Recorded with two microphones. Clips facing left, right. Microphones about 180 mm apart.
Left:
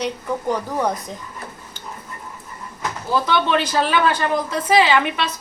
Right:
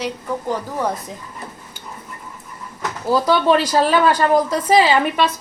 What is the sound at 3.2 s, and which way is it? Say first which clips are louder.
A woman's voice: right 4 dB; 40° right (ahead or behind).